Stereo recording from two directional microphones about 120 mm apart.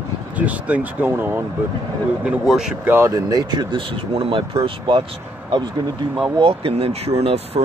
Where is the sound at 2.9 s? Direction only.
20° right (ahead or behind); by 5.0 s 40° right (ahead or behind).